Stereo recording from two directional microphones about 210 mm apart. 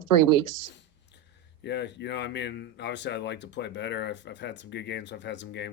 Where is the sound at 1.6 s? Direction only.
55° left (ahead or behind).